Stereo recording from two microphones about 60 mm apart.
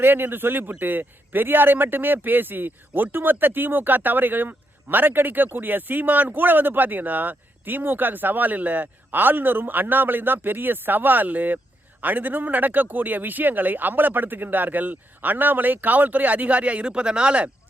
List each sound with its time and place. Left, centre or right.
0.0 s speech: right; by 17.5 s centre